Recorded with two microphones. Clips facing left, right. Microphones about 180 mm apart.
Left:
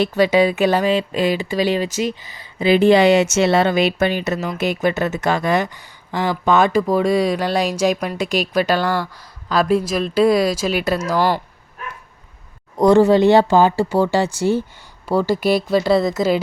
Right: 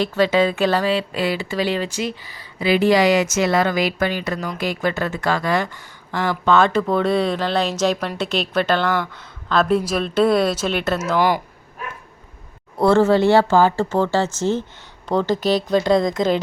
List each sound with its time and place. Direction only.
0.0 s speech: 15° left (ahead or behind)
11.2 s speech: 15° right (ahead or behind)
12.8 s speech: 15° left (ahead or behind)